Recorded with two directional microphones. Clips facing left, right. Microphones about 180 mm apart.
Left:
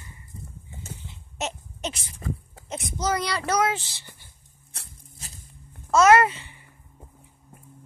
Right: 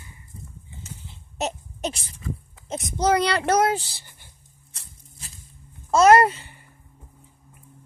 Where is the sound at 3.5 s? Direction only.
40° right (ahead or behind).